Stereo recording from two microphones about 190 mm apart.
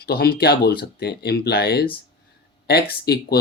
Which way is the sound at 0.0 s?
55° left (ahead or behind).